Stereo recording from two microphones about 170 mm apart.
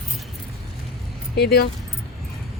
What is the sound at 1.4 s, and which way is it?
Speech, 65° left (ahead or behind).